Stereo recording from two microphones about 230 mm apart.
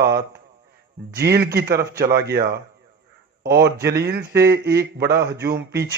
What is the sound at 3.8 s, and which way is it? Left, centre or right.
A man's voice, right.